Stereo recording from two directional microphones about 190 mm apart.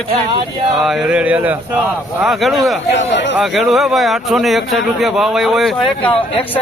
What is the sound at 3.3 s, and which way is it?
Speech, centre (ahead or behind).